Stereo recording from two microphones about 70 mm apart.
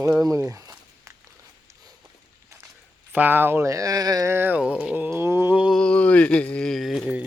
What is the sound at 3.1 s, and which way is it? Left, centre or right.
Speech, right.